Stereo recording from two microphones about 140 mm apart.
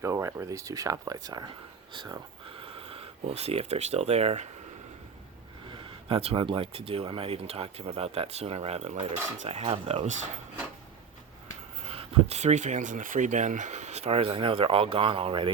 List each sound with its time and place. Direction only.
0.0 s speech: 20° right (ahead or behind); by 4.4 s 50° right (ahead or behind)
5.6 s speech: 35° right (ahead or behind); by 10.2 s 55° right (ahead or behind)
11.8 s speech: 45° right (ahead or behind)